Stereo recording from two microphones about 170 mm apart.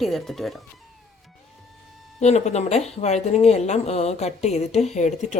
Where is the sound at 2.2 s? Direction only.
40° left (ahead or behind).